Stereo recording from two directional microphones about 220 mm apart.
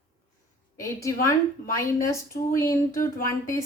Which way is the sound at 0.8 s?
15° left (ahead or behind).